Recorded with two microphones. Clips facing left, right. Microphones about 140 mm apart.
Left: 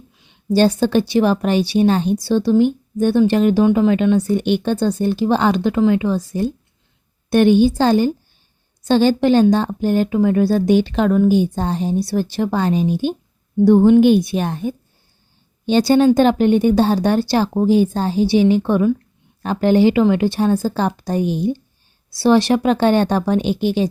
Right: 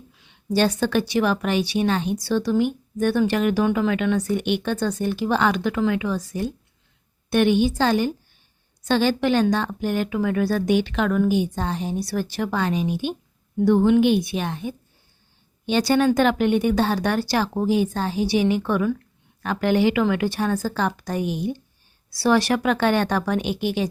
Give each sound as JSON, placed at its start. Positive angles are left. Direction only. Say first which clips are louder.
{"t": 0.5, "sound": "a woman's voice", "louder": "left 6 dB", "side_deg": 30}
{"t": 15.6, "sound": "speech", "louder": "left 6 dB", "side_deg": 30}